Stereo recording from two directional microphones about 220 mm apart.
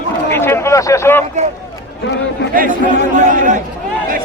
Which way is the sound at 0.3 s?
10° left (ahead or behind).